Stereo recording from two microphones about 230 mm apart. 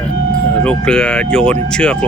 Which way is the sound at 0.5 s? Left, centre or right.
Centre.